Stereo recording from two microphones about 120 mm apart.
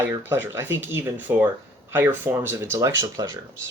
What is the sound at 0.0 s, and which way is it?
Speech, 15° right (ahead or behind).